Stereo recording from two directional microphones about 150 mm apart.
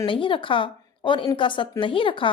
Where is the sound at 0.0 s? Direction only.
35° left (ahead or behind).